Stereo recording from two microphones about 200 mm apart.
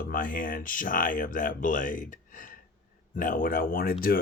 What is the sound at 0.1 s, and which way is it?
Speech, 45° left (ahead or behind).